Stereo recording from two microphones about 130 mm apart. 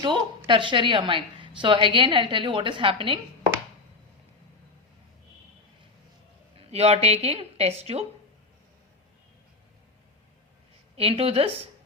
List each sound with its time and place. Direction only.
0.0 s a woman's voice: 40° right (ahead or behind)
6.6 s a woman's voice: 55° right (ahead or behind)
10.9 s a woman's voice: 50° right (ahead or behind)